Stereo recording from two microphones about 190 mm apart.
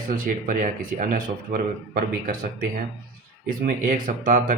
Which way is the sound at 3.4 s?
45° right (ahead or behind).